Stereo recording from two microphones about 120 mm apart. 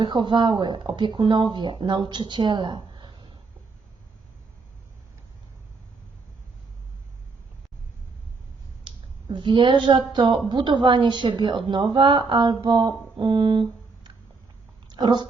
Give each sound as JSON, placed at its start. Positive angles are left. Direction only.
{"t": 0.0, "sound": "a woman's voice", "side_deg": -40}
{"t": 9.3, "sound": "a woman's voice", "side_deg": -45}
{"t": 14.8, "sound": "a sound", "side_deg": -40}